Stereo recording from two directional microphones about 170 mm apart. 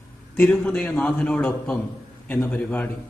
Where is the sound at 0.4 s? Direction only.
5° left (ahead or behind).